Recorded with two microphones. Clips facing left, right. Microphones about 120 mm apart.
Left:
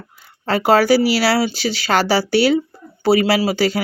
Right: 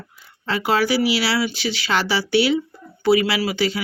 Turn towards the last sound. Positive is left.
turn(degrees=40)  # may be behind; listen again after turning